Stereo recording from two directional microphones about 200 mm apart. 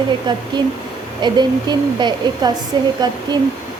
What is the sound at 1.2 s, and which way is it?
Speech, 20° right (ahead or behind).